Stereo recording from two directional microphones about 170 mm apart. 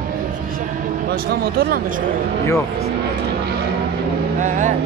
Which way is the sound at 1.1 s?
60° right (ahead or behind).